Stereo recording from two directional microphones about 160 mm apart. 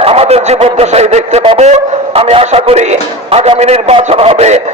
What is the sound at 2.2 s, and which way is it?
Music, 40° right (ahead or behind).